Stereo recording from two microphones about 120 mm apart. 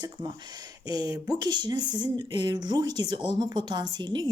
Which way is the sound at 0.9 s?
35° right (ahead or behind).